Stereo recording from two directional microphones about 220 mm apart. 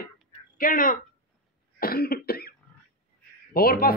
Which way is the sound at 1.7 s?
45° left (ahead or behind).